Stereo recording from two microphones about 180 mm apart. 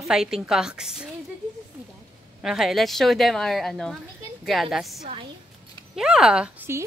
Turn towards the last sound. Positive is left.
turn(degrees=-10)  # may be behind; listen again after turning